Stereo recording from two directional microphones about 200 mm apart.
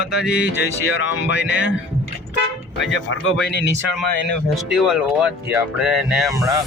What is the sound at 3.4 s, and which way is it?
Speech, 55° left (ahead or behind).